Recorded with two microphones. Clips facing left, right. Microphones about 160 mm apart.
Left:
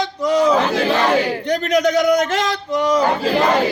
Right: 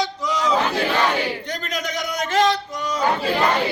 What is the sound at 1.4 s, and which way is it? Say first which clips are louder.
A man's voice: left 12 dB; 65° left (ahead or behind).